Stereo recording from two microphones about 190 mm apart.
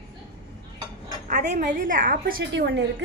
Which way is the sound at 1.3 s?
45° right (ahead or behind).